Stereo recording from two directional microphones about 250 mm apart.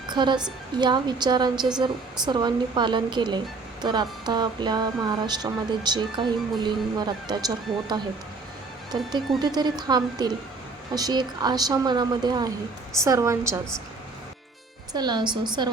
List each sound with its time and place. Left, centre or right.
0.1 s a woman's voice: centre
9.4 s a woman's voice: centre
14.9 s a woman's voice: centre